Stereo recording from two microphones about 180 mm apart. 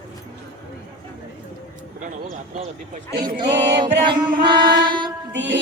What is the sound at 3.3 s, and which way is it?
Speech, 20° right (ahead or behind).